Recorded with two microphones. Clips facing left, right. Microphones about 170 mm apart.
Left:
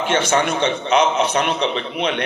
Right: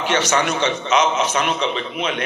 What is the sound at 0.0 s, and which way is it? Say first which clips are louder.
A man's voice: left 1 dB; 55° left (ahead or behind).